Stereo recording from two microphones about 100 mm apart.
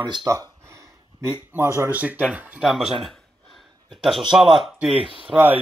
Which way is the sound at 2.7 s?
Centre (ahead or behind).